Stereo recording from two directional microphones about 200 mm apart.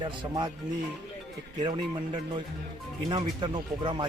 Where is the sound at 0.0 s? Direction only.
20° right (ahead or behind).